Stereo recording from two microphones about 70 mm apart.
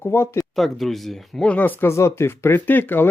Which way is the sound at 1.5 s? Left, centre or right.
Left.